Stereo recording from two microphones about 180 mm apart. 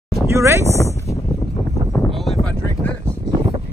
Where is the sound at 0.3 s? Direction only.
15° right (ahead or behind).